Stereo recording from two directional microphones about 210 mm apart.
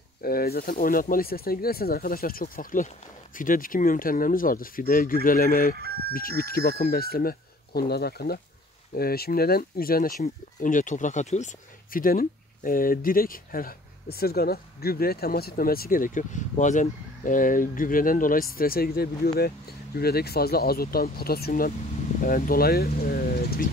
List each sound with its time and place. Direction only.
0.2 s speech: 45° left (ahead or behind)